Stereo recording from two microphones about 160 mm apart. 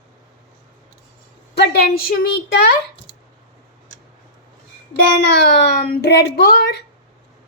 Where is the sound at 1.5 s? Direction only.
85° left; by 2.7 s 70° left (ahead or behind).